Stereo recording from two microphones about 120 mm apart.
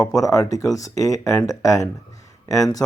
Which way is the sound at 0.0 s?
25° left (ahead or behind).